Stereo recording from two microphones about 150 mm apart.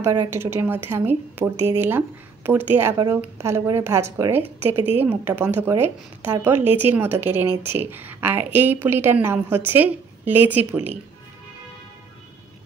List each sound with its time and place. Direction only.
0.0 s a woman's voice: 20° right (ahead or behind)